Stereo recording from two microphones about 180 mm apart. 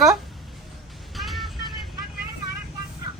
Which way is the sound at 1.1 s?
Centre (ahead or behind).